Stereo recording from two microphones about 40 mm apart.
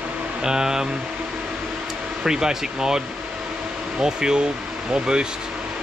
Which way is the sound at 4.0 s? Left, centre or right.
Centre.